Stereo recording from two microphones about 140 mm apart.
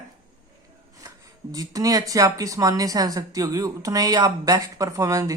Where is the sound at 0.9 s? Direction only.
25° right (ahead or behind).